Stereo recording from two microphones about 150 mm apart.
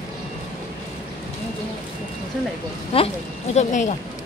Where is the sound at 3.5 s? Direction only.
50° left (ahead or behind).